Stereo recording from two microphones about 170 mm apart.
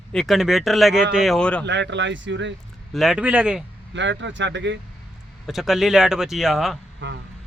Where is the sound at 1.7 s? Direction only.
90° right.